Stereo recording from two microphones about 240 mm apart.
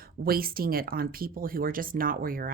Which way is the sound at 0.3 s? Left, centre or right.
Right.